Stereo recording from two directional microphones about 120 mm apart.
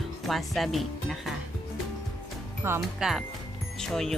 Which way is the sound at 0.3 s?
Centre (ahead or behind).